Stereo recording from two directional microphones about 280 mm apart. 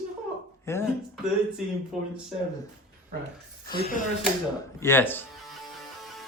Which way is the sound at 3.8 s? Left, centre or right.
Left.